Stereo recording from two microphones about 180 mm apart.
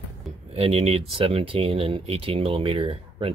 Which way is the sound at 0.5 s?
35° right (ahead or behind).